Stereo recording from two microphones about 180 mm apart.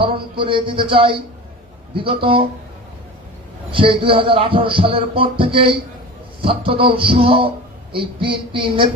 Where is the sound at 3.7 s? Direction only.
30° right (ahead or behind).